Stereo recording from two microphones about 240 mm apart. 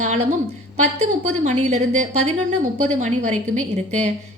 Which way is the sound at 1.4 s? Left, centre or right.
Right.